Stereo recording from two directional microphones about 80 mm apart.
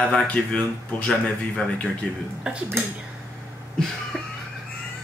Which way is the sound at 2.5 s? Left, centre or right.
Centre.